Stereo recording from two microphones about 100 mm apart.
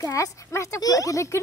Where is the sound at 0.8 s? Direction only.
35° left (ahead or behind).